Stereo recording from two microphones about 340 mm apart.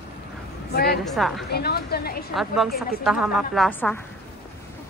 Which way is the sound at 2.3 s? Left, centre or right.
Centre.